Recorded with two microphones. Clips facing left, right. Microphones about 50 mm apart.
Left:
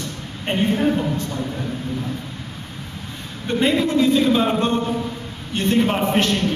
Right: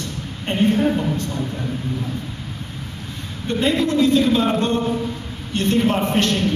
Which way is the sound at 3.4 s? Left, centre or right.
Centre.